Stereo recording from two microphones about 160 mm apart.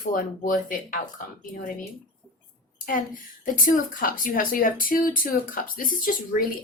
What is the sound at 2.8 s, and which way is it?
Speech, 55° left (ahead or behind).